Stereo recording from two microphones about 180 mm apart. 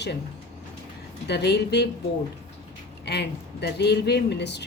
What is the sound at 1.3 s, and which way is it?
Speech, 70° left (ahead or behind).